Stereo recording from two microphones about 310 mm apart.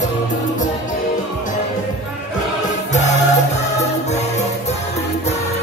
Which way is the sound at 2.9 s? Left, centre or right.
Left.